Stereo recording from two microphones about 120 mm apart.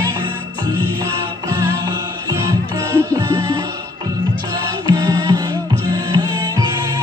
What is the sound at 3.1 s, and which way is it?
Music, 35° right (ahead or behind).